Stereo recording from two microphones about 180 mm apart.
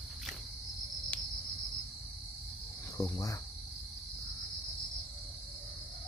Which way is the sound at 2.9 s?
20° left (ahead or behind).